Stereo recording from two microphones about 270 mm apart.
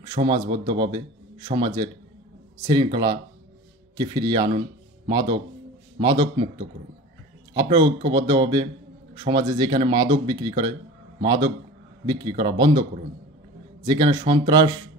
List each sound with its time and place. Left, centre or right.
0.0 s speech: centre
7.5 s speech: centre